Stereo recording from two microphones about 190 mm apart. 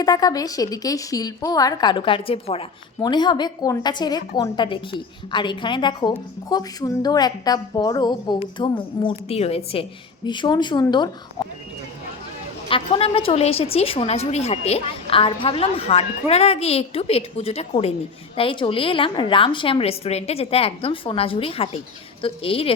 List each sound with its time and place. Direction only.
0.0 s a woman's voice: 20° left (ahead or behind)
12.6 s a woman's voice: 30° left (ahead or behind)